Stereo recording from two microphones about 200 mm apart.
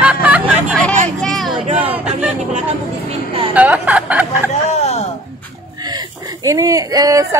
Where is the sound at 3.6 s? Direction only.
5° right (ahead or behind).